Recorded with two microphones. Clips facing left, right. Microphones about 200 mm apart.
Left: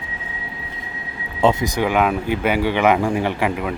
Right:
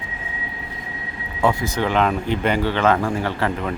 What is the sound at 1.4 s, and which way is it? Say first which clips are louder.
Speech: left 3 dB; 20° left (ahead or behind).